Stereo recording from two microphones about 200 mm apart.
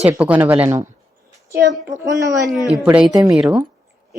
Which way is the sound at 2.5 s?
Centre (ahead or behind).